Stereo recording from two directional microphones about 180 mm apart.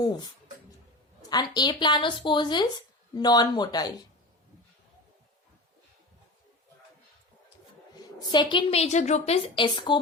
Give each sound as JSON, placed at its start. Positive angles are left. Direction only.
{"t": 0.0, "sound": "a woman's voice", "side_deg": 25}
{"t": 1.3, "sound": "a woman's voice", "side_deg": 20}
{"t": 8.2, "sound": "a woman's voice", "side_deg": 25}